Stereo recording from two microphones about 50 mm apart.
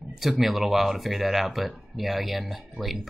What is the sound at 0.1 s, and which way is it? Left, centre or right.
Speech, centre.